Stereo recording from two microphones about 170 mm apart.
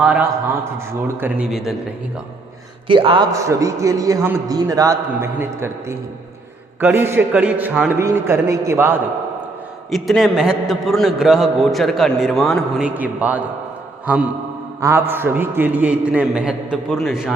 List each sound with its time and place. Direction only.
0.0 s a man's voice: 10° right (ahead or behind)
1.5 s a man's voice: centre (ahead or behind)
2.8 s speech: 30° right (ahead or behind)
3.3 s a man's voice: 20° right (ahead or behind)
9.9 s a man's voice: centre (ahead or behind)
14.8 s a man's voice: 15° right (ahead or behind)